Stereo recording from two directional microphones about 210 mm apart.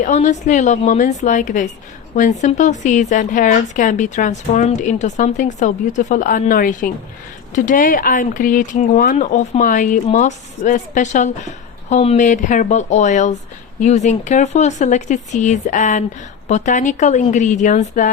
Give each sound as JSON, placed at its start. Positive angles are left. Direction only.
{"t": 0.0, "sound": "speech", "side_deg": 35}